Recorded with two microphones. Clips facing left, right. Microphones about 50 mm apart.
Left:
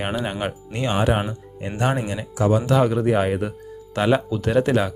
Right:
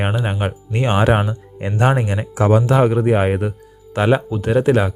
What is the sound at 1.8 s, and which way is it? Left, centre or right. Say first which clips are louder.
Speech: right 5 dB; right.